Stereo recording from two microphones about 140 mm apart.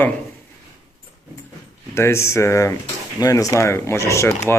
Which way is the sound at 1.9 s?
20° left (ahead or behind).